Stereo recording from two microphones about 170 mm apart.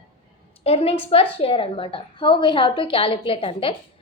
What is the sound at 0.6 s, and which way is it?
A woman's voice, 35° left (ahead or behind).